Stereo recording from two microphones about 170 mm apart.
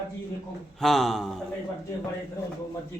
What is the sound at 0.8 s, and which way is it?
Speech, centre (ahead or behind).